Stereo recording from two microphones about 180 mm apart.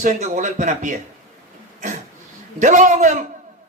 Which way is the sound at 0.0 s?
45° right (ahead or behind).